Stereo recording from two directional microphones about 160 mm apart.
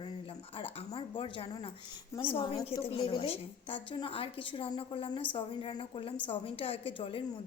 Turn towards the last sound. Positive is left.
turn(degrees=35)  # may be behind; listen again after turning